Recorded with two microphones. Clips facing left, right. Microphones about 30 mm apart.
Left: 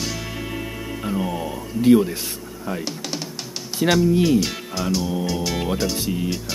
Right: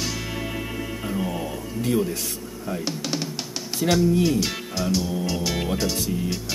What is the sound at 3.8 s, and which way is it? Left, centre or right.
Speech, left.